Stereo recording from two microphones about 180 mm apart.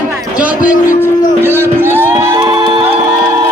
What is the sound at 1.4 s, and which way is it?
Music, 15° right (ahead or behind).